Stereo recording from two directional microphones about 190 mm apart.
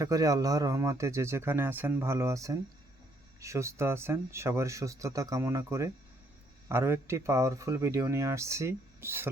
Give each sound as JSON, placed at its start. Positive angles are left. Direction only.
{"t": 0.0, "sound": "speech", "side_deg": -20}